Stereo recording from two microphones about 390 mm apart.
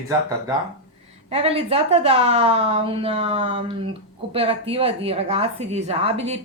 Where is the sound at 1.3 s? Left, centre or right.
Centre.